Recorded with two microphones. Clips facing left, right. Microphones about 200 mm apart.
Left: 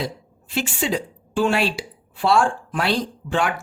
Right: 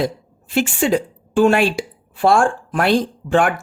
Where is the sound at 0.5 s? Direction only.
50° right (ahead or behind).